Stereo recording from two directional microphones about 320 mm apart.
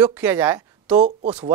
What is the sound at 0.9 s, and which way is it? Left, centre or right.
Speech, right.